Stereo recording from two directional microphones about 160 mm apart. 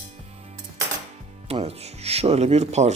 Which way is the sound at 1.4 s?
40° right (ahead or behind).